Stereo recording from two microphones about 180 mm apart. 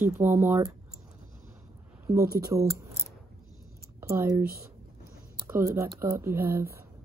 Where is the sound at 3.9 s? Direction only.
15° right (ahead or behind).